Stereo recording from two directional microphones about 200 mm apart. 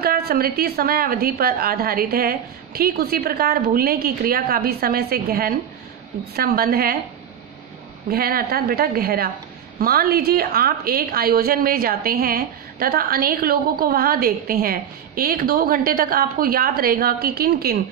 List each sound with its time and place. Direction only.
0.0 s a woman's voice: 50° right (ahead or behind)
8.1 s a woman's voice: 50° right (ahead or behind)